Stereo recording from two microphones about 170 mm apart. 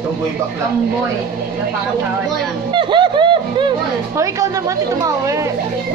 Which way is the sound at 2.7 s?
30° right (ahead or behind).